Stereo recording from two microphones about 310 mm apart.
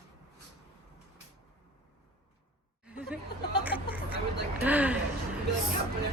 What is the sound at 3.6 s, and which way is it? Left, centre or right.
Vehicle, centre.